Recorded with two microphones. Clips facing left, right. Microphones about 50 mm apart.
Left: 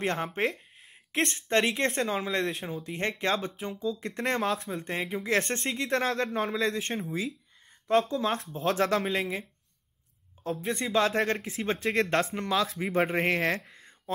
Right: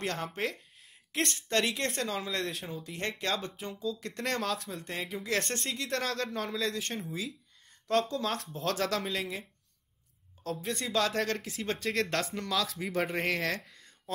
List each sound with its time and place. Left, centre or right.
0.0 s speech: left; by 2.8 s centre
2.8 s speech: left
3.7 s speech: centre
4.0 s speech: left
10.7 s speech: left
13.7 s a sound: left